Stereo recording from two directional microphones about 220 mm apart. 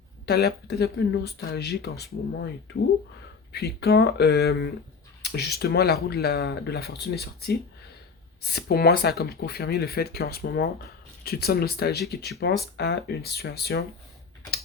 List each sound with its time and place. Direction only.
0.3 s speech: 50° left (ahead or behind)
3.5 s speech: 45° left (ahead or behind)